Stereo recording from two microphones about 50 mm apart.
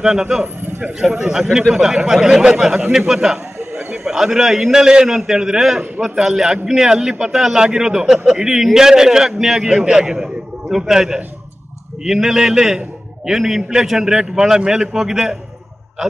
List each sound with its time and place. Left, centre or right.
0.0 s a man's voice: centre
0.7 s a sound: right
0.9 s a man's voice: centre